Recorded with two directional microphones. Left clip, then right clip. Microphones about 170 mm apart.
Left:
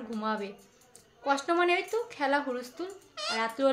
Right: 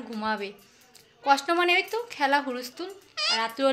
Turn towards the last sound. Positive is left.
turn(degrees=-10)  # may be behind; listen again after turning